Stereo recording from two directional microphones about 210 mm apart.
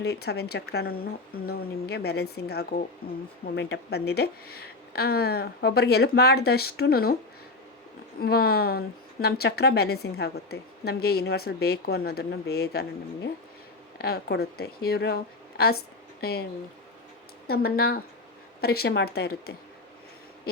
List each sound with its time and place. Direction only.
0.0 s speech: 50° left (ahead or behind)
8.2 s speech: 45° left (ahead or behind)
14.0 s speech: 50° left (ahead or behind)
17.5 s speech: 50° left (ahead or behind)